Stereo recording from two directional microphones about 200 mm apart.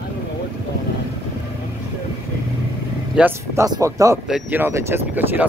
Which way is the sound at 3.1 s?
10° right (ahead or behind).